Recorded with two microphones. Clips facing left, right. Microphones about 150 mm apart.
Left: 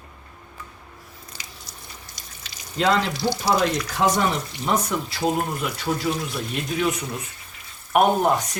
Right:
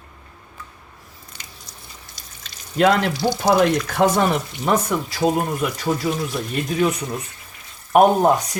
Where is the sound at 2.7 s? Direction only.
60° right (ahead or behind).